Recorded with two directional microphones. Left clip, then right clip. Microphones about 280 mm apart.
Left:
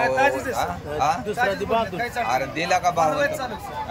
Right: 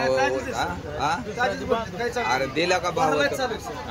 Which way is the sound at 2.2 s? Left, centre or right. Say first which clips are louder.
Right 1 dB; centre.